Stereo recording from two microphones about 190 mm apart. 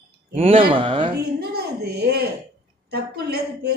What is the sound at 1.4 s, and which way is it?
A woman's voice, 55° right (ahead or behind).